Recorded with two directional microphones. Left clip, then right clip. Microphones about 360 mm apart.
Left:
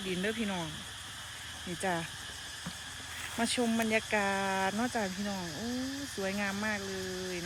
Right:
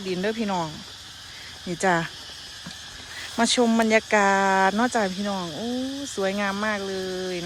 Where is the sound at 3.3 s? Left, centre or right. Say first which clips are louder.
Right 11 dB; centre.